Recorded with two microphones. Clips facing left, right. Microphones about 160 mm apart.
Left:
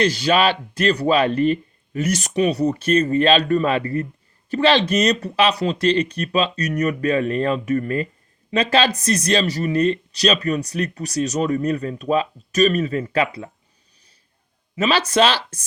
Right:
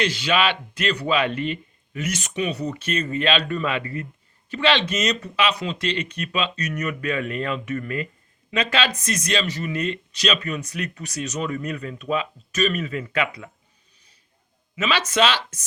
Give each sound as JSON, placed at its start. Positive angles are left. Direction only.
{"t": 0.0, "sound": "speech", "side_deg": 40}
{"t": 14.8, "sound": "speech", "side_deg": 35}